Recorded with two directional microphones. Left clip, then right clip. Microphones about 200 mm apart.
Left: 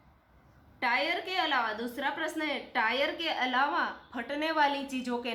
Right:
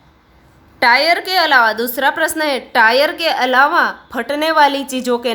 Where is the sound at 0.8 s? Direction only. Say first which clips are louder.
Right 17 dB; 55° right (ahead or behind).